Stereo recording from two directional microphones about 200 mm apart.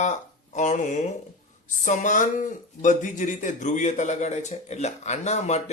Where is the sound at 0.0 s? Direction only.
35° left (ahead or behind).